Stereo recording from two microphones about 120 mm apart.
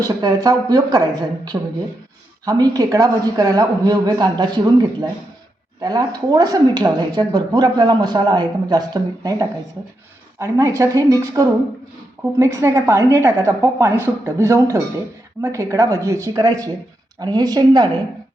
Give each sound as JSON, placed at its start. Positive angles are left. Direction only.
{"t": 0.0, "sound": "a woman's voice", "side_deg": -30}